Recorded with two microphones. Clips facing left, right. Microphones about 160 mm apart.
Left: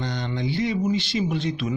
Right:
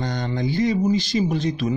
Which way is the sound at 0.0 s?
45° right (ahead or behind).